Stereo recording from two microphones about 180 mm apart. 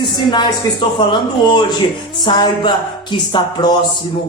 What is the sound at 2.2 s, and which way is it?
Speech, 25° left (ahead or behind).